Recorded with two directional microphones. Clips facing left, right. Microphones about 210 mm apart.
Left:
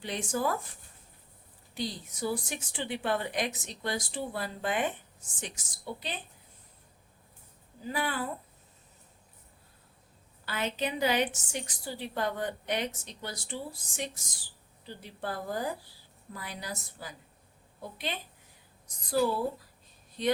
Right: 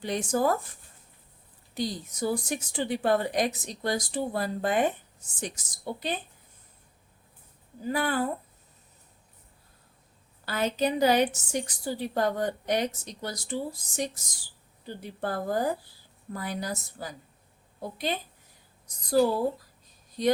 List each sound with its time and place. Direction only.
0.0 s a woman's voice: 40° right (ahead or behind)
1.7 s a woman's voice: 45° right (ahead or behind)
7.9 s a woman's voice: 45° right (ahead or behind)
10.4 s a woman's voice: 40° right (ahead or behind)